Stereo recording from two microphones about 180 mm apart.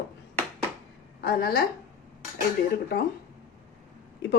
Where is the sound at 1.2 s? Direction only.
60° left (ahead or behind).